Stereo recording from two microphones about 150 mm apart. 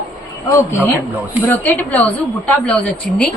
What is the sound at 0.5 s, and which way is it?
A woman's voice, 15° left (ahead or behind).